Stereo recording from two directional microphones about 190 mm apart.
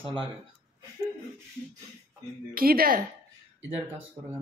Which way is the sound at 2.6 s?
50° right (ahead or behind).